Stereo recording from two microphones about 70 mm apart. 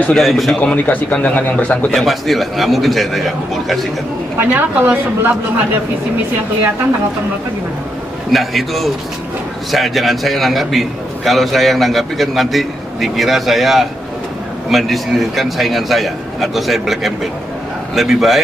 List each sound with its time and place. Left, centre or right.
0.1 s a man's voice: centre
0.6 s speech: left
2.0 s a man's voice: centre
4.4 s a woman's voice: right
8.3 s a man's voice: centre